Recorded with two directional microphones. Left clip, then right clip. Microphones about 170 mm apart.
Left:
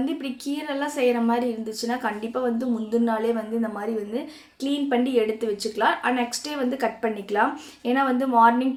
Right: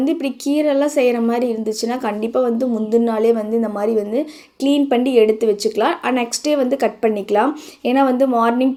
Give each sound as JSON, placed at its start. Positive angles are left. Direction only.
{"t": 0.0, "sound": "speech", "side_deg": -40}